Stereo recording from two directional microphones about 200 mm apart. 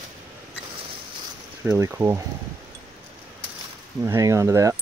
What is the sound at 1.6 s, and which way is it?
Speech, 15° right (ahead or behind).